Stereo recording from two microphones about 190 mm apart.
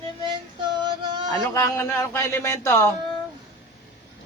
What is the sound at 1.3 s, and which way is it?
A man's voice, 15° left (ahead or behind).